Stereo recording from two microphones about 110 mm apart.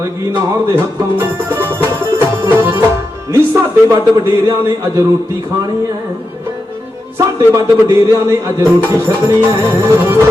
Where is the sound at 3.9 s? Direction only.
30° right (ahead or behind).